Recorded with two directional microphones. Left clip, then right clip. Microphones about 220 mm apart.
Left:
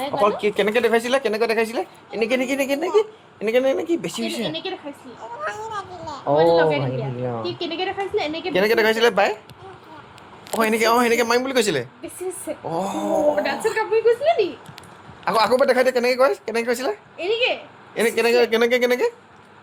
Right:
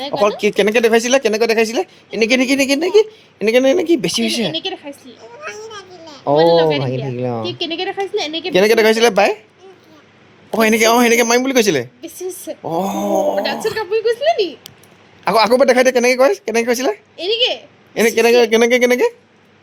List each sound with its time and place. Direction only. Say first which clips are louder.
0.0 s a woman's voice: right 4 dB; 45° right (ahead or behind)
6.2 s a woman's voice: right 5 dB; 45° right (ahead or behind)
10.5 s a woman's voice: right 6 dB; 45° right (ahead or behind)